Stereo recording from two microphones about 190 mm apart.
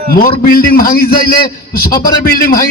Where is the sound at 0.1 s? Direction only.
50° left (ahead or behind).